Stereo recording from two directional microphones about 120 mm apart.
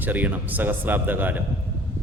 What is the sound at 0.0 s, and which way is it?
Speech, 15° right (ahead or behind).